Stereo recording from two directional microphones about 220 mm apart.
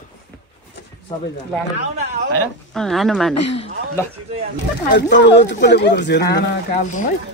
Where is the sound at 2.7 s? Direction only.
Centre (ahead or behind).